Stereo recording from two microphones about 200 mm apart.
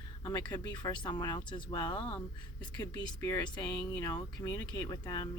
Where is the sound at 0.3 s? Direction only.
20° left (ahead or behind).